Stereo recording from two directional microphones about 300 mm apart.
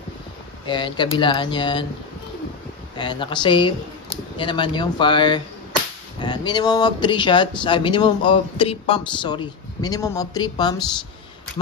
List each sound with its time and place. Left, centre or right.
0.7 s speech: centre
3.0 s speech: centre